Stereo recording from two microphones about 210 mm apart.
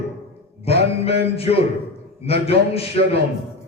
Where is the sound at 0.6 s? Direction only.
30° left (ahead or behind).